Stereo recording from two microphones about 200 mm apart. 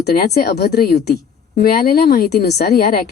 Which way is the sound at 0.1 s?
50° left (ahead or behind).